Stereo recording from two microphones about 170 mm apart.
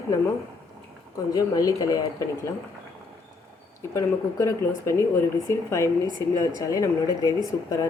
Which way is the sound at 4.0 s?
20° left (ahead or behind).